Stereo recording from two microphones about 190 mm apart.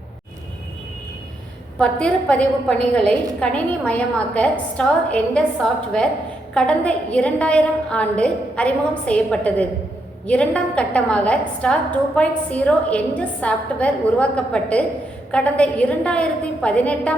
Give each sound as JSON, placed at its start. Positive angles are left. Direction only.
{"t": 1.8, "sound": "a woman's voice", "side_deg": 5}
{"t": 6.5, "sound": "a woman's voice", "side_deg": 5}